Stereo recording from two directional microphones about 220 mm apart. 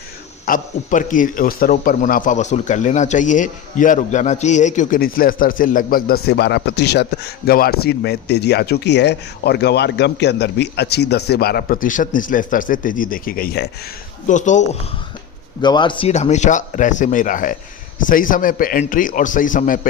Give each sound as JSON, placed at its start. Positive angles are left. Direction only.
{"t": 0.4, "sound": "a man's voice", "side_deg": 40}
{"t": 15.6, "sound": "a man's voice", "side_deg": 20}